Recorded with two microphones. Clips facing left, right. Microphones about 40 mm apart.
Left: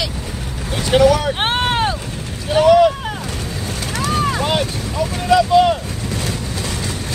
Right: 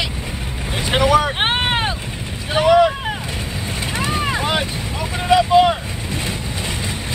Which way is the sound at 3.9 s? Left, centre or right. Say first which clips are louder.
Left 2 dB; right.